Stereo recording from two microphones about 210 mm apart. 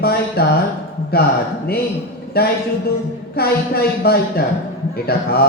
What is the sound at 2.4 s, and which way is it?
Speech, 50° left (ahead or behind).